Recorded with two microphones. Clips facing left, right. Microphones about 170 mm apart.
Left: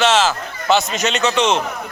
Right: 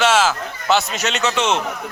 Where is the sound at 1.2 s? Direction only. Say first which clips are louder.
Left 3 dB; 15° left (ahead or behind).